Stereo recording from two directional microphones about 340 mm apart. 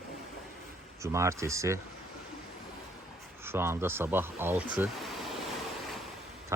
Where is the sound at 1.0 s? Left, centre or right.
Centre.